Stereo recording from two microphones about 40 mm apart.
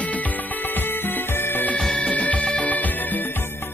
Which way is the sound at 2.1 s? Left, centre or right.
Left.